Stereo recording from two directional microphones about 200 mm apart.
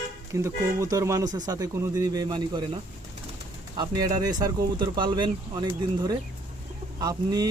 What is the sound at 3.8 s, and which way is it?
Speech, 20° right (ahead or behind).